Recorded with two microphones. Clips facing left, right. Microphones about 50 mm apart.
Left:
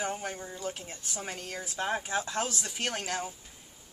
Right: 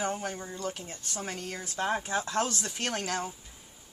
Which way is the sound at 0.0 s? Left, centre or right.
Centre.